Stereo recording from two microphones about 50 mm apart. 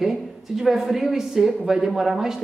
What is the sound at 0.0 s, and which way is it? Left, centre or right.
A woman's voice, centre.